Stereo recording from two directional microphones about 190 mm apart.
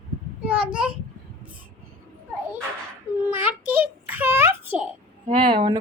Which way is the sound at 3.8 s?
10° right (ahead or behind).